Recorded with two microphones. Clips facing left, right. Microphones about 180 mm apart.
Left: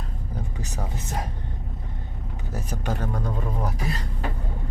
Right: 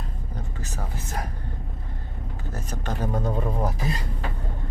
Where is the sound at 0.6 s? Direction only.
15° left (ahead or behind).